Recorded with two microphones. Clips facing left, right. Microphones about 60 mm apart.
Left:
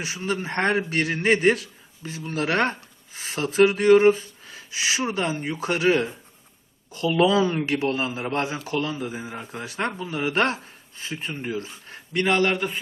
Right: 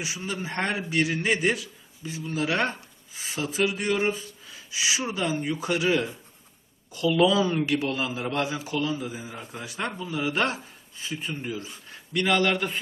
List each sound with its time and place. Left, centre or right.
0.0 s a man's voice: left
8.6 s speech: left
11.9 s a sound: left
12.5 s a man's voice: centre